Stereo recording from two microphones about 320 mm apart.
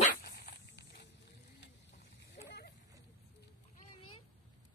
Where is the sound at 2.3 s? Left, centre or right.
Left.